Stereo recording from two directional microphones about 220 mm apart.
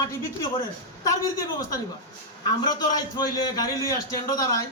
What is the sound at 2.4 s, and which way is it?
A man's voice, 20° left (ahead or behind).